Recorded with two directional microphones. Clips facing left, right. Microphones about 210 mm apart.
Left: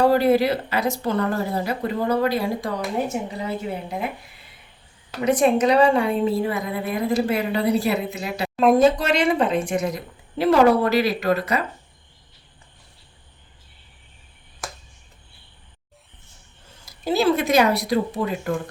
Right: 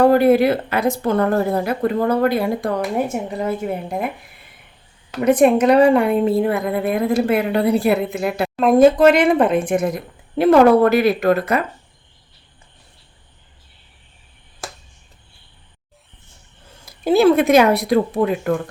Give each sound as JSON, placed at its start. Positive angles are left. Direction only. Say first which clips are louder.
{"t": 0.0, "sound": "a woman's voice", "louder": "right 4 dB", "side_deg": -55}
{"t": 5.2, "sound": "a woman's voice", "louder": "right 5 dB", "side_deg": -55}
{"t": 16.8, "sound": "a woman's voice", "louder": "right 7 dB", "side_deg": -55}